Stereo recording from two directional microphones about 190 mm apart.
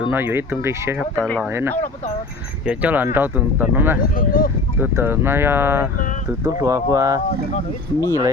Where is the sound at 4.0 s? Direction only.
50° left (ahead or behind).